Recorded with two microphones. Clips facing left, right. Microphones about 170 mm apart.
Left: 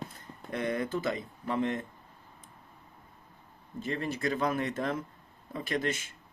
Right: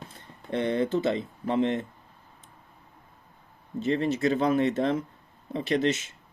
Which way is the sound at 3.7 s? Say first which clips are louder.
Right 8 dB; 25° right (ahead or behind).